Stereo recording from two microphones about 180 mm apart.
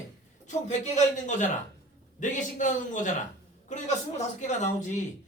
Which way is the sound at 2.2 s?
45° left (ahead or behind).